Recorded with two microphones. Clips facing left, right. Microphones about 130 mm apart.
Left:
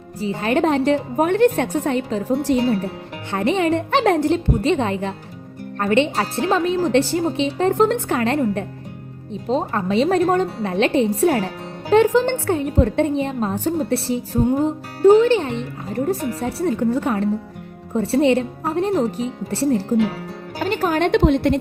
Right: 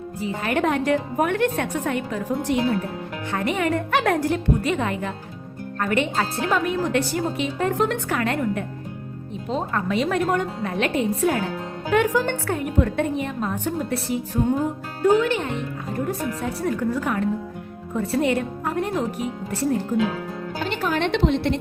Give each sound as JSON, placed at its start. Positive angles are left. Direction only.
{"t": 0.2, "sound": "a woman's voice", "side_deg": 30}
{"t": 14.4, "sound": "music", "side_deg": 15}
{"t": 15.0, "sound": "a woman's voice", "side_deg": 30}
{"t": 20.7, "sound": "a woman's voice", "side_deg": 45}